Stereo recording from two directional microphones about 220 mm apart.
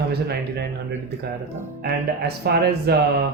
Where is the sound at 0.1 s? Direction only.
45° right (ahead or behind).